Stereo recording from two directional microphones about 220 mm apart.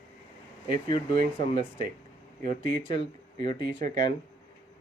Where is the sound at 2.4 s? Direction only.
40° right (ahead or behind).